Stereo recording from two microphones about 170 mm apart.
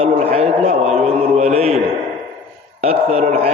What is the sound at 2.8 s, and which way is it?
Speech, 35° right (ahead or behind).